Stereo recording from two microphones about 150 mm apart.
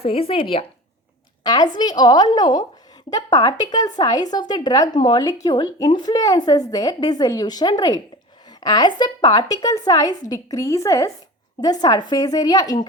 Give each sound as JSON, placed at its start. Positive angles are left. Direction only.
{"t": 0.0, "sound": "a woman's voice", "side_deg": 40}